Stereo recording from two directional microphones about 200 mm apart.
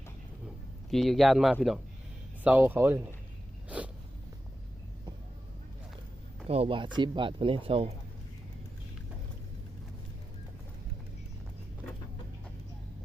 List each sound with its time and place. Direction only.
0.4 s a sound: centre (ahead or behind)
2.4 s speech: 5° right (ahead or behind)
6.5 s speech: 30° right (ahead or behind)